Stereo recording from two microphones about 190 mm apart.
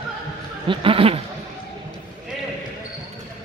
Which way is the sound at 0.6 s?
30° right (ahead or behind).